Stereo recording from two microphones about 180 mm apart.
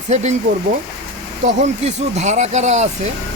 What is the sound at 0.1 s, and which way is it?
Speech, 40° right (ahead or behind).